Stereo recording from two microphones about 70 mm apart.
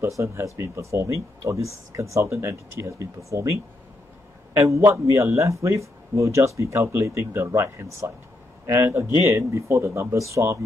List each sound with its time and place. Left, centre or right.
0.2 s a man's voice: right
4.6 s a man's voice: right